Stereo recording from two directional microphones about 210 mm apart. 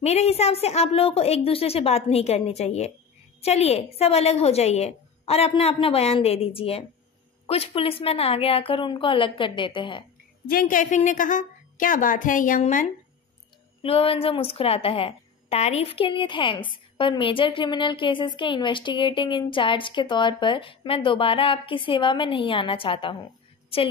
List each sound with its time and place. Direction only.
0.0 s a woman's voice: 30° left (ahead or behind)
10.5 s a woman's voice: 40° left (ahead or behind)
13.8 s a woman's voice: 25° left (ahead or behind)